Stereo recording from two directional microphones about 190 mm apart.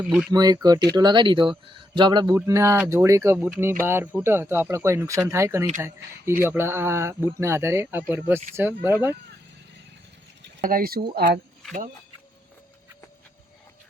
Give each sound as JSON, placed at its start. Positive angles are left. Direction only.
{"t": 0.0, "sound": "speech", "side_deg": -5}
{"t": 0.3, "sound": "speech", "side_deg": -20}
{"t": 10.4, "sound": "speech", "side_deg": -50}